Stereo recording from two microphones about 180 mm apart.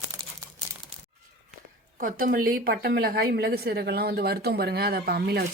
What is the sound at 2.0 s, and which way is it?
Speech, 50° right (ahead or behind).